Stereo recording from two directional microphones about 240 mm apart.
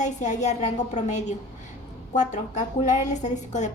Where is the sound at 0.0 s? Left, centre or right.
Left.